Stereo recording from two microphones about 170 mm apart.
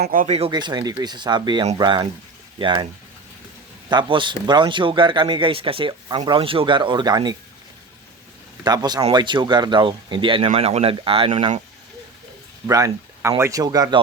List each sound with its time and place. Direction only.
0.0 s speech: 55° right (ahead or behind)
0.3 s a man's voice: 30° right (ahead or behind)
3.8 s a man's voice: 25° right (ahead or behind)
8.6 s a man's voice: 25° right (ahead or behind)
12.6 s a man's voice: 20° right (ahead or behind)